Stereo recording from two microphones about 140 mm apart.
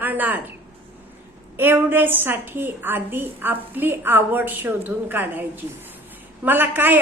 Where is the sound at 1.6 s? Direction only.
15° right (ahead or behind).